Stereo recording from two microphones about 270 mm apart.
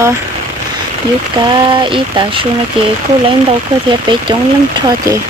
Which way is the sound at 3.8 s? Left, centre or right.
Centre.